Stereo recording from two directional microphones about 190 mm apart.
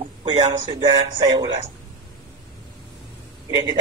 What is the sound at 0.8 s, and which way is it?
Speech, 25° right (ahead or behind).